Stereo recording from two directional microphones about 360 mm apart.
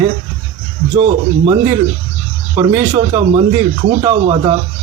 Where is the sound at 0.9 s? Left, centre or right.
Centre.